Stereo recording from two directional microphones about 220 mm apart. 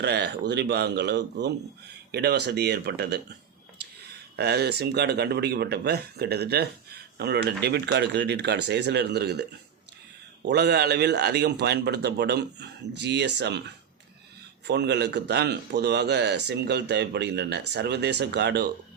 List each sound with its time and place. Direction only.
0.0 s speech: 50° right (ahead or behind)
4.4 s speech: 50° right (ahead or behind)
10.5 s speech: 50° right (ahead or behind)
14.7 s speech: 50° right (ahead or behind)